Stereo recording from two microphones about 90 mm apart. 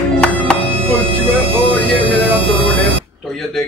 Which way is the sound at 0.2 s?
10° left (ahead or behind).